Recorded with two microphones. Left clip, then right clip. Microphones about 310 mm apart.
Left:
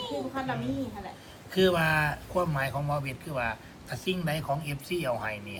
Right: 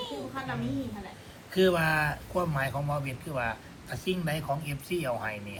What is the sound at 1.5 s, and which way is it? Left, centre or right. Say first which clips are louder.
A man's voice: left 1 dB; centre.